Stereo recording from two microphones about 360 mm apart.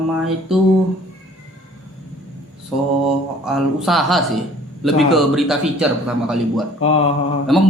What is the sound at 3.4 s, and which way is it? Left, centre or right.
A man's voice, centre.